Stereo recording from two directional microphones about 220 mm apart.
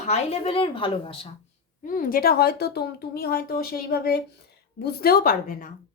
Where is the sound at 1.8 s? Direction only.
40° left (ahead or behind).